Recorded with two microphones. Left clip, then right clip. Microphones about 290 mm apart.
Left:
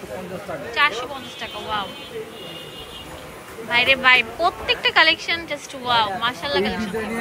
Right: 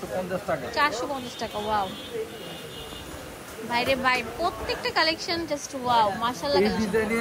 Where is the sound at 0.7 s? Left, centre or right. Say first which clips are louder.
Left 6 dB; centre.